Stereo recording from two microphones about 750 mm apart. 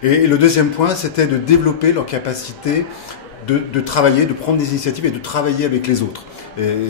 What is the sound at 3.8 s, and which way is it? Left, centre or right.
A man's voice, left.